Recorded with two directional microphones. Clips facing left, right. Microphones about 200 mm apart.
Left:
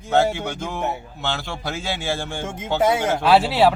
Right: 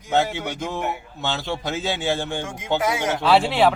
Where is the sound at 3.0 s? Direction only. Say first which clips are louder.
Left 2 dB; 10° left (ahead or behind).